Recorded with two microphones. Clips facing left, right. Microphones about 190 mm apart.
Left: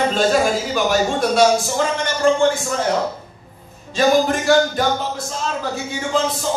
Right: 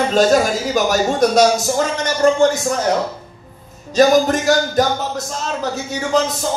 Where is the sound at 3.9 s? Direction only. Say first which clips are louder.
Right 3 dB; 40° right (ahead or behind).